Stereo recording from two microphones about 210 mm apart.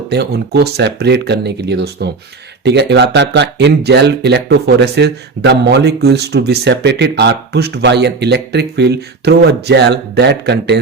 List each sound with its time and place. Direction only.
0.1 s speech: 50° right (ahead or behind)